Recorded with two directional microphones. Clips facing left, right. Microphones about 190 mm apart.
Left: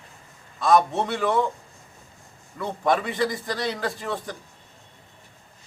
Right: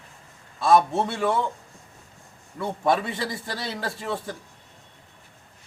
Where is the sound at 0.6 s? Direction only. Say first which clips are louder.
Even; 30° right (ahead or behind).